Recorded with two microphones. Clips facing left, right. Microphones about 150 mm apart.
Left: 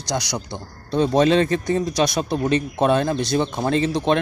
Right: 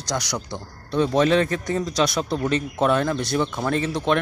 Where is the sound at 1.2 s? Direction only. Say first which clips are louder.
Left 3 dB; 25° left (ahead or behind).